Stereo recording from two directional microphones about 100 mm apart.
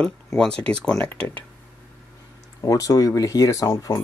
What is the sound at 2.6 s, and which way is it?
Speech, 35° left (ahead or behind).